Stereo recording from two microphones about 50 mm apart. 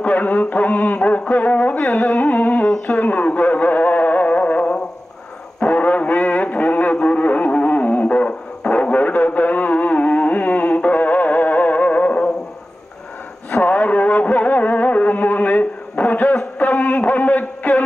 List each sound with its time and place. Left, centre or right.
0.0 s radio: left
2.9 s music: left
8.3 s radio: left
13.5 s music: left
16.5 s a sound: left